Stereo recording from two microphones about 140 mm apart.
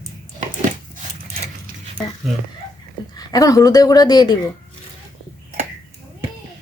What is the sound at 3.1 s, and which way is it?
Speech, 25° left (ahead or behind).